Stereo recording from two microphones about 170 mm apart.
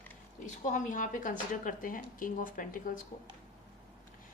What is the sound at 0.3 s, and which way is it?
Speech, 50° left (ahead or behind).